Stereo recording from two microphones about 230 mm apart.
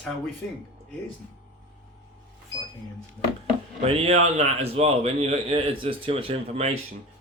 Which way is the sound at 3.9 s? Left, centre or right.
Right.